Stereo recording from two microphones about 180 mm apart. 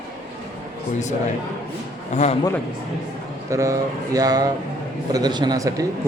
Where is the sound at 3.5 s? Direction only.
20° right (ahead or behind).